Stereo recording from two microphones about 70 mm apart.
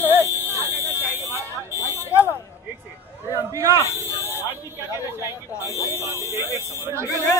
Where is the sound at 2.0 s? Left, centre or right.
Left.